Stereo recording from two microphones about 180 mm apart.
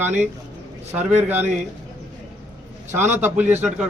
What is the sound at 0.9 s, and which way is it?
Speech, 10° right (ahead or behind).